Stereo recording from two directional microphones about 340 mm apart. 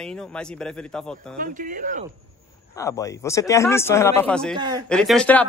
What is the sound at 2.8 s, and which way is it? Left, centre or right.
Speech, centre.